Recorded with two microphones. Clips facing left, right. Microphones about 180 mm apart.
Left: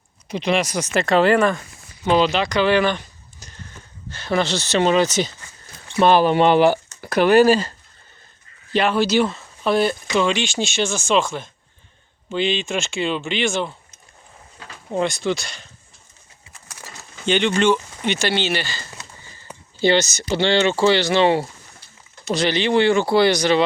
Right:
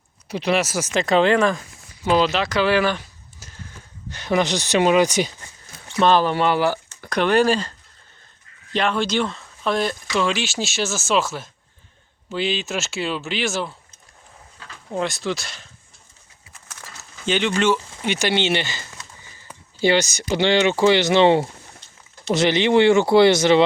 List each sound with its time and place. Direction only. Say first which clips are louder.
0.3 s speech: even; 10° right (ahead or behind)
6.0 s speech: left 3 dB; 15° left (ahead or behind)
6.9 s speech: left 2 dB; 5° left (ahead or behind)
8.7 s speech: left 4 dB; 5° left (ahead or behind)
14.9 s speech: left 3 dB; centre (ahead or behind)
17.2 s speech: left 2 dB; centre (ahead or behind); by 18.8 s 20° right (ahead or behind)
19.8 s speech: left 1 dB; 10° right (ahead or behind)